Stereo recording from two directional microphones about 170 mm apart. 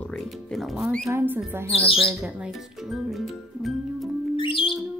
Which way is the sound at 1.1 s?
15° right (ahead or behind).